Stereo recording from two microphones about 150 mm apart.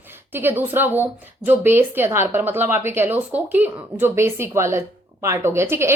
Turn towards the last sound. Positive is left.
turn(degrees=-15)  # may be behind; listen again after turning